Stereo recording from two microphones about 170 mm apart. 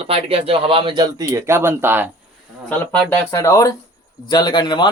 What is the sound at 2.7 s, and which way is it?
Speech, 10° left (ahead or behind).